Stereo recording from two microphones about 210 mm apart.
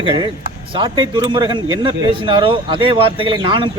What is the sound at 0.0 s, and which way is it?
A man's voice, 25° right (ahead or behind).